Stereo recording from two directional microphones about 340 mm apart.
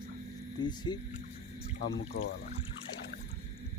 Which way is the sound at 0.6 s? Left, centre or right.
Centre.